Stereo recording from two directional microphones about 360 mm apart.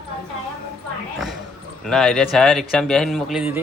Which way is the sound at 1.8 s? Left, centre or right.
Centre.